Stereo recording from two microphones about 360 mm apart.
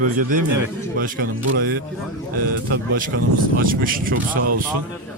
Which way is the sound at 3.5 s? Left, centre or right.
Right.